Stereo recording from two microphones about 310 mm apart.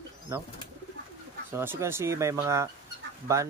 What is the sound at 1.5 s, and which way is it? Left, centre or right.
Speech, centre.